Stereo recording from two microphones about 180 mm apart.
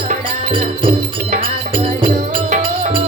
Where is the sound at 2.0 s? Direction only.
45° right (ahead or behind).